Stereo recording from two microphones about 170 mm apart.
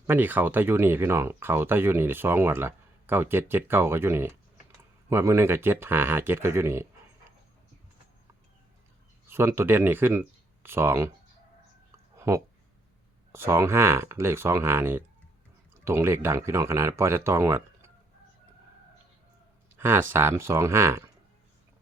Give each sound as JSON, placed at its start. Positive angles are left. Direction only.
{"t": 0.1, "sound": "speech", "side_deg": -10}
{"t": 9.2, "sound": "speech", "side_deg": -15}
{"t": 12.1, "sound": "a sound", "side_deg": -15}
{"t": 13.3, "sound": "speech", "side_deg": -15}
{"t": 19.7, "sound": "speech", "side_deg": -15}